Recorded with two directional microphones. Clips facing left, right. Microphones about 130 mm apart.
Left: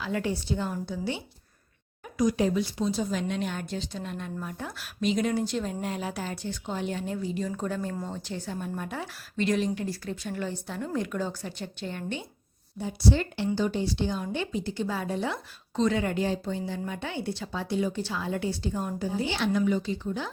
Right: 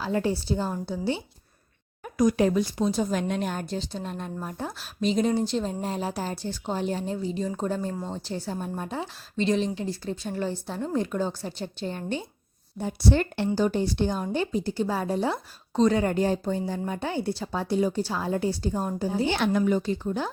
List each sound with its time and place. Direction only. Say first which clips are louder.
0.0 s speech: right 4 dB; 35° right (ahead or behind)
2.0 s a woman's voice: right 3 dB; 50° right (ahead or behind); by 12.2 s 35° right (ahead or behind)
12.8 s a woman's voice: right 2 dB; 55° right (ahead or behind)
13.5 s speech: right 3 dB; 45° right (ahead or behind)
19.2 s speech: right 3 dB; 50° right (ahead or behind)